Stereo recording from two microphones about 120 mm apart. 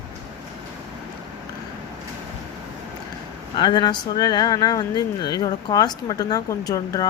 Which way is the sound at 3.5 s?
40° left (ahead or behind).